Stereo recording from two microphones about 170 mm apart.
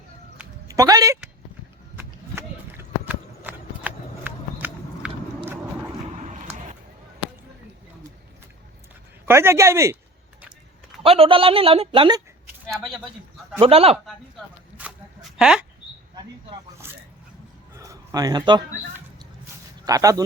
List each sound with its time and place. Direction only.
0.7 s a woman's voice: 20° right (ahead or behind)
2.0 s clip-clop: 15° right (ahead or behind)
6.1 s a sound: 45° right (ahead or behind)
9.2 s speech: 15° right (ahead or behind)
11.0 s a woman's voice: 35° right (ahead or behind)
12.7 s speech: centre (ahead or behind)
13.6 s a woman's voice: 35° right (ahead or behind)
14.8 s a sound: 5° right (ahead or behind)
16.8 s a sound: 15° right (ahead or behind)
19.8 s speech: 20° right (ahead or behind)